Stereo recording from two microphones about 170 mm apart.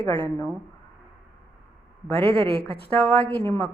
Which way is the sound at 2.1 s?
35° right (ahead or behind).